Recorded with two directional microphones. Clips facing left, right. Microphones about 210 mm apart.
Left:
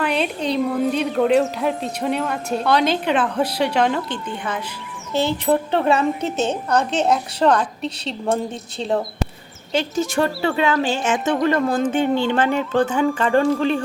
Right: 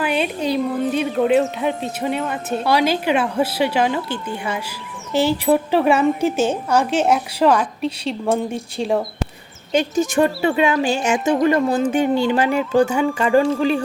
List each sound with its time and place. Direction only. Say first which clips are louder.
0.0 s a woman's voice: right 1 dB; 5° right (ahead or behind)
10.0 s a woman's voice: right 3 dB; 15° right (ahead or behind)